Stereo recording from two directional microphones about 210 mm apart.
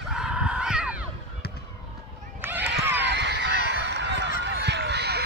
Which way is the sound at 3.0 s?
55° right (ahead or behind).